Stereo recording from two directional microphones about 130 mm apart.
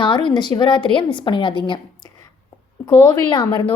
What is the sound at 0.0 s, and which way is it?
A woman's voice, 40° left (ahead or behind).